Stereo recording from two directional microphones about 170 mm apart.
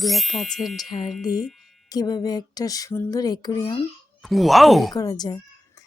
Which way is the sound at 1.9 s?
25° left (ahead or behind).